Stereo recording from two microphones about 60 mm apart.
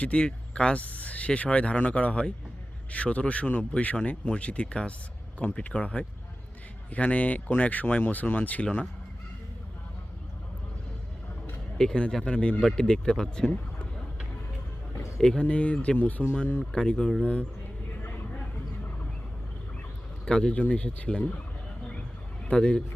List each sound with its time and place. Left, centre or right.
0.0 s speech: centre
11.8 s speech: centre
15.2 s speech: centre
18.0 s vehicle: left
20.2 s speech: centre
22.4 s speech: centre